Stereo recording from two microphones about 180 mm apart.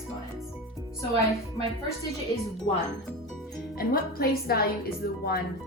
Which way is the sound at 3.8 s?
55° left (ahead or behind).